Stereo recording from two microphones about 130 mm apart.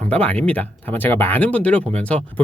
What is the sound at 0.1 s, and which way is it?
Speech, 10° left (ahead or behind).